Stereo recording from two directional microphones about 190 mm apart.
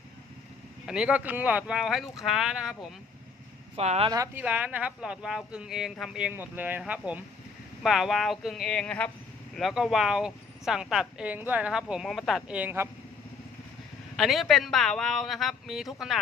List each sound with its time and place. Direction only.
0.9 s speech: 5° right (ahead or behind)
3.8 s speech: 35° right (ahead or behind)
4.1 s speech: 15° right (ahead or behind)
14.2 s speech: centre (ahead or behind)